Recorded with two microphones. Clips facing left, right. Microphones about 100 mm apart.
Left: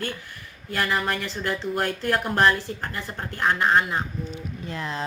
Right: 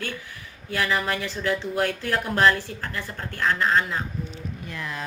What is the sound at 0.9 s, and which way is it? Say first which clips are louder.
Speech: even; centre (ahead or behind).